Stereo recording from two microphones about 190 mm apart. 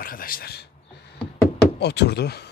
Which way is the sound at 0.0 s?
50° left (ahead or behind).